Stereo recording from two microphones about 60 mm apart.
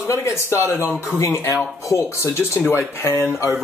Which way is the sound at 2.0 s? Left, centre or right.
Left.